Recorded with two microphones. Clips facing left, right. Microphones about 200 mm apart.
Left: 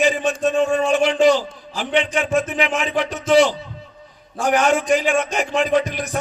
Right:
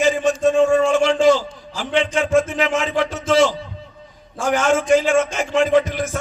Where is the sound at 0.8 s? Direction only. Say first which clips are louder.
Right 1 dB; 15° left (ahead or behind).